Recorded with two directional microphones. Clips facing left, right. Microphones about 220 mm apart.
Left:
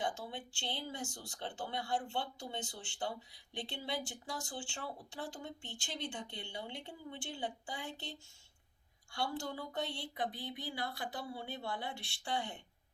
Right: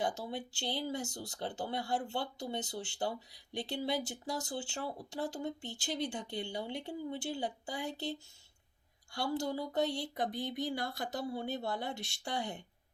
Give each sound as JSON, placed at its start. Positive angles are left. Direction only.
{"t": 0.0, "sound": "speech", "side_deg": -40}
{"t": 9.1, "sound": "speech", "side_deg": -40}